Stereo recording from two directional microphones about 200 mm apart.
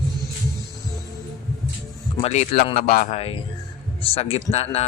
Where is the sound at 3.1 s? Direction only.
30° left (ahead or behind).